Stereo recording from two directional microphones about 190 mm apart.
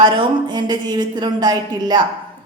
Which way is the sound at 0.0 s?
25° right (ahead or behind).